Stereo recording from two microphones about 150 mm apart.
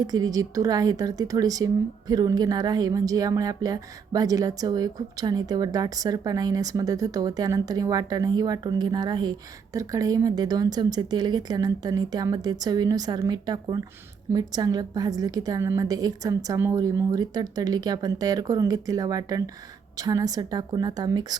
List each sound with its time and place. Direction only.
0.0 s speech: 25° right (ahead or behind)